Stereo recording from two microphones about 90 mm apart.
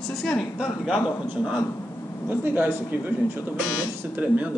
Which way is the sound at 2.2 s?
20° right (ahead or behind).